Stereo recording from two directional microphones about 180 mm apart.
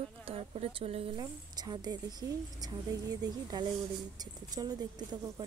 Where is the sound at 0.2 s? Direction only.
30° right (ahead or behind).